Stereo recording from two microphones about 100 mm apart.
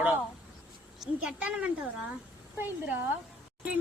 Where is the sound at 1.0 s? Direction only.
10° right (ahead or behind).